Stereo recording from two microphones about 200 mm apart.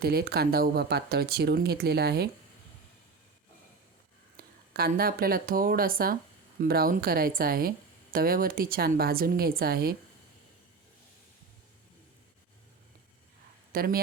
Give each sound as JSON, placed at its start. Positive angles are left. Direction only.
{"t": 0.0, "sound": "speech", "side_deg": -50}
{"t": 4.4, "sound": "speech", "side_deg": -50}
{"t": 13.7, "sound": "speech", "side_deg": -45}